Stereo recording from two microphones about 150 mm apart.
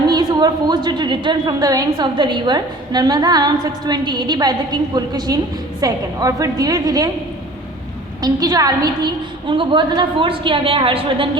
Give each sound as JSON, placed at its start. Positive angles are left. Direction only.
{"t": 0.1, "sound": "a woman's voice", "side_deg": -25}
{"t": 8.2, "sound": "a woman's voice", "side_deg": -25}